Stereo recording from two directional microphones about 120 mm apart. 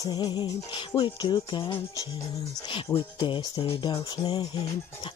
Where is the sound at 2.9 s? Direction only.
30° left (ahead or behind).